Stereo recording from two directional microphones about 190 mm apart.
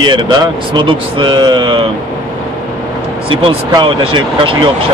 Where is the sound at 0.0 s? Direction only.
25° right (ahead or behind).